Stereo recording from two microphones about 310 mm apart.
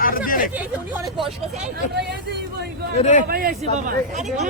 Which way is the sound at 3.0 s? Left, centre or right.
Left.